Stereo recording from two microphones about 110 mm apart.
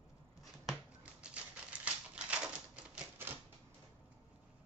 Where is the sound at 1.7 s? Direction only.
15° right (ahead or behind).